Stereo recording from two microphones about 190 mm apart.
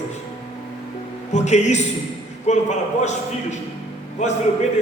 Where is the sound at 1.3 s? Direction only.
35° left (ahead or behind).